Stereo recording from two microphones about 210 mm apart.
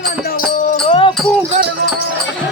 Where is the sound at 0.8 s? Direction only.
25° left (ahead or behind).